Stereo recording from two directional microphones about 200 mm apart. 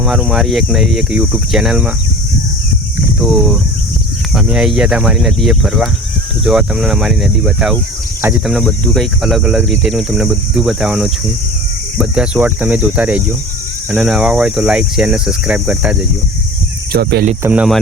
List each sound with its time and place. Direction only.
0.0 s speech: centre (ahead or behind)
3.2 s speech: centre (ahead or behind)
16.9 s speech: 50° right (ahead or behind)
17.4 s speech: 5° right (ahead or behind)